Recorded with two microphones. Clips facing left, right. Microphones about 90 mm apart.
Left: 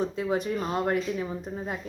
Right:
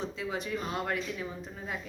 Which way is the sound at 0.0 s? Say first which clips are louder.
Left 8 dB; 50° left (ahead or behind).